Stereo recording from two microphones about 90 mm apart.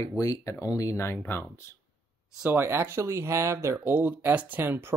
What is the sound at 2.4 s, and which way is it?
Speech, 25° right (ahead or behind).